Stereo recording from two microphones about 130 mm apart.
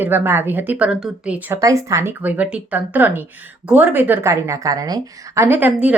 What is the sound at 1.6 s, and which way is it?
Speech, 25° right (ahead or behind).